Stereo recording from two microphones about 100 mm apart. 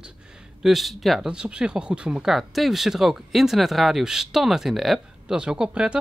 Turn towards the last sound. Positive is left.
turn(degrees=-10)  # may be behind; listen again after turning